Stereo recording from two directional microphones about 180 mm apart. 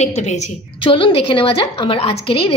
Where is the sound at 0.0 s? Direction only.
40° left (ahead or behind).